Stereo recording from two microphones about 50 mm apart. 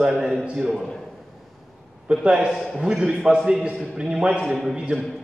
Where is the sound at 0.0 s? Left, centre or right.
Centre.